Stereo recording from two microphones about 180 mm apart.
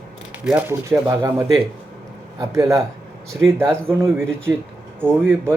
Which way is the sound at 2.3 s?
15° right (ahead or behind).